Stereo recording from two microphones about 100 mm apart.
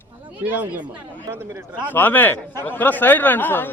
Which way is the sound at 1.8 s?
20° left (ahead or behind).